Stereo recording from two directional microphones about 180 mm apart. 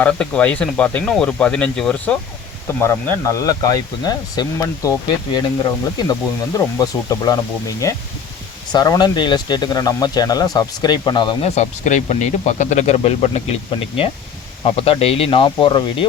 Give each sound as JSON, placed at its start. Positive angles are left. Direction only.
{"t": 0.0, "sound": "speech", "side_deg": 5}
{"t": 2.8, "sound": "speech", "side_deg": 15}
{"t": 8.7, "sound": "speech", "side_deg": 20}
{"t": 11.5, "sound": "speech", "side_deg": 40}